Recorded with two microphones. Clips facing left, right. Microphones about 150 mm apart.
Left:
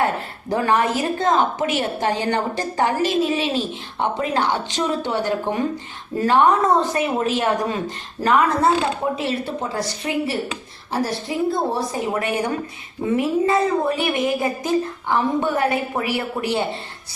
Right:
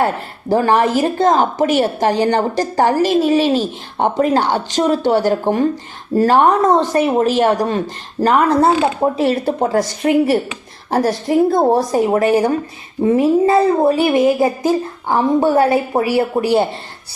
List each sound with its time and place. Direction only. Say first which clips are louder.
0.0 s a woman's voice: right 4 dB; 30° right (ahead or behind)
9.0 s a woman's voice: right 7 dB; 40° right (ahead or behind)